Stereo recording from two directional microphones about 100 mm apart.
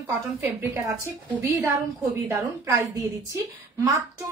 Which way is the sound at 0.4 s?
25° right (ahead or behind).